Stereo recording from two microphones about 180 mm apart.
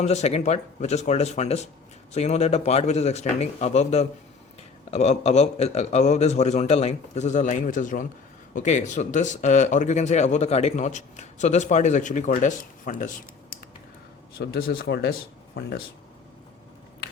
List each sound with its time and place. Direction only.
0.0 s speech: 40° left (ahead or behind)
14.3 s speech: 60° left (ahead or behind)